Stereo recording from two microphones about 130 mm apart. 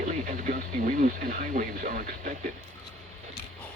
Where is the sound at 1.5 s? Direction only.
90° right.